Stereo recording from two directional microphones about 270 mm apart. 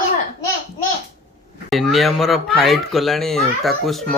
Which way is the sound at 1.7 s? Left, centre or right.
Centre.